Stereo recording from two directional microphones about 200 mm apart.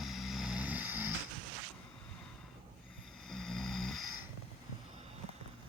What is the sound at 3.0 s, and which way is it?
Snoring, centre (ahead or behind).